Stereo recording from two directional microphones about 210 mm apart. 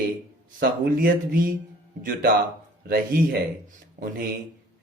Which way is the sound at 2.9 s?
45° right (ahead or behind).